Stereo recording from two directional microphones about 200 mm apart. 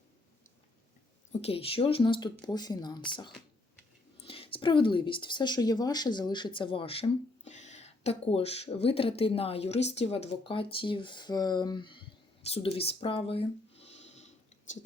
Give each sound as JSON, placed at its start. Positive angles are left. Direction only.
{"t": 1.3, "sound": "speech", "side_deg": 30}